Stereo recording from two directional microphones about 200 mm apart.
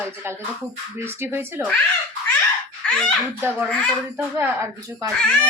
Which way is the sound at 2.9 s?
5° left (ahead or behind).